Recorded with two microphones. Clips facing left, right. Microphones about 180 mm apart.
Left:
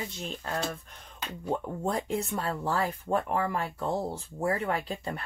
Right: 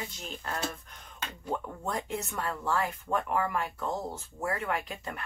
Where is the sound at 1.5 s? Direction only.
30° left (ahead or behind).